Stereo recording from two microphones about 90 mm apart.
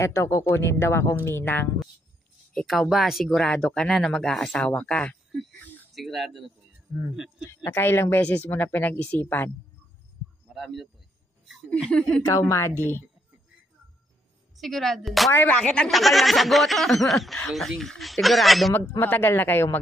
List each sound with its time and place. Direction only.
0.0 s a man's voice: 35° left (ahead or behind)
2.5 s speech: centre (ahead or behind)
3.3 s speech: 15° left (ahead or behind)
5.6 s a sound: 20° left (ahead or behind)
5.9 s speech: centre (ahead or behind)
7.6 s a man's voice: 25° left (ahead or behind)
8.2 s a man's voice: 15° left (ahead or behind)
10.5 s speech: centre (ahead or behind)
11.8 s speech: 10° left (ahead or behind)
12.3 s a woman's voice: 35° left (ahead or behind)
14.6 s speech: 5° left (ahead or behind)
15.3 s speech: 15° left (ahead or behind)
15.9 s speech: centre (ahead or behind)
18.7 s a man's voice: 25° left (ahead or behind)